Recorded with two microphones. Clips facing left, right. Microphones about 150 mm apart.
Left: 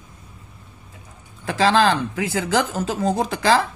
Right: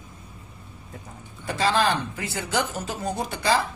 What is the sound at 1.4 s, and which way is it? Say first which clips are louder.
Speech: left 5 dB; 90° left.